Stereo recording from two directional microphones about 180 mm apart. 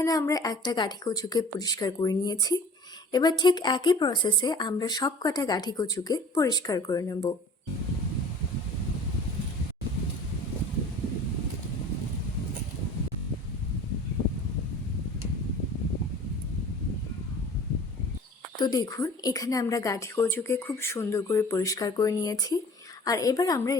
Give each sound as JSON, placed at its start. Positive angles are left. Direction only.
{"t": 0.0, "sound": "speech", "side_deg": 20}
{"t": 18.6, "sound": "a woman's voice", "side_deg": 20}